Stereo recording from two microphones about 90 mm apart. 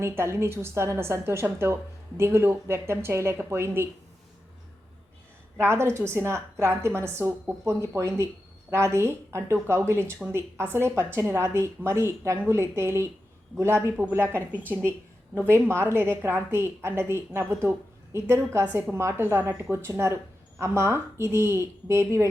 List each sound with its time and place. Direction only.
0.0 s a woman's voice: 30° right (ahead or behind)
5.5 s a woman's voice: 30° right (ahead or behind)